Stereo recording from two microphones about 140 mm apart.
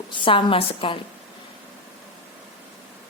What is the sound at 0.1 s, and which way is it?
Speech, 35° left (ahead or behind).